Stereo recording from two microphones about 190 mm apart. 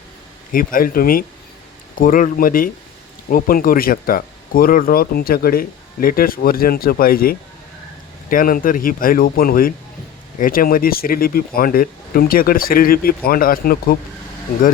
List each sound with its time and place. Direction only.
0.5 s speech: 50° left (ahead or behind)